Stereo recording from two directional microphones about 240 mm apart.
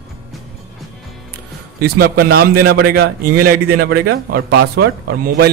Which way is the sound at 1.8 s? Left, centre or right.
Right.